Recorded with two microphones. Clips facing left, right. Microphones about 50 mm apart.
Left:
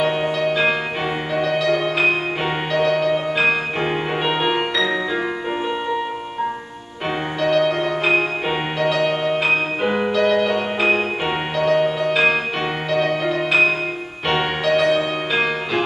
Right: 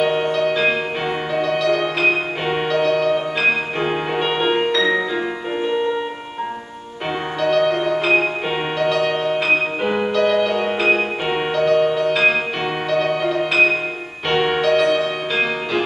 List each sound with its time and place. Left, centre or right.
0.0 s music: centre
7.4 s music: centre